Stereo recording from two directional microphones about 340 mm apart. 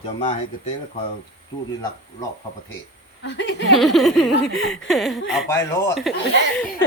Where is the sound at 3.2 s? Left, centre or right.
Left.